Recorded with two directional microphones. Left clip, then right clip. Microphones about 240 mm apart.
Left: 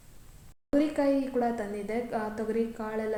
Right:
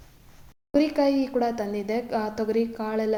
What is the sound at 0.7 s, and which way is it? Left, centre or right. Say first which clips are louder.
A woman's voice: right 4 dB; right.